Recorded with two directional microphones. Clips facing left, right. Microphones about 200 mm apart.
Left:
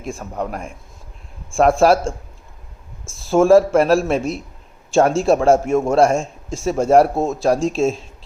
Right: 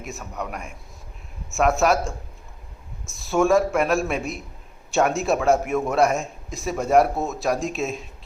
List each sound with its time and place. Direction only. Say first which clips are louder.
0.0 s a man's voice: left 6 dB; 30° left (ahead or behind)
3.2 s a man's voice: left 7 dB; 30° left (ahead or behind)